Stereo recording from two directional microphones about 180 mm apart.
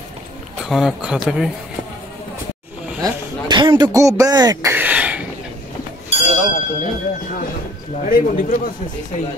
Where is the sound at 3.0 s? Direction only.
25° right (ahead or behind).